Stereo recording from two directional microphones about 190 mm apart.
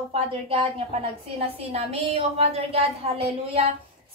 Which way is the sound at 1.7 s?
30° right (ahead or behind).